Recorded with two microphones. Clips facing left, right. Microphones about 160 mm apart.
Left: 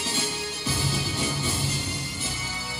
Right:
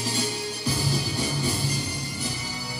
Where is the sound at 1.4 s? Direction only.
Centre (ahead or behind).